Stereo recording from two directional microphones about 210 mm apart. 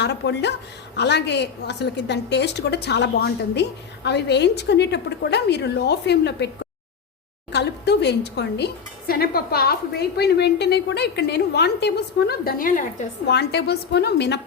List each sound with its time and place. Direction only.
0.0 s a woman's voice: 55° left (ahead or behind)
7.5 s a woman's voice: 55° left (ahead or behind); by 13.1 s 40° left (ahead or behind)
13.2 s a woman's voice: 50° left (ahead or behind)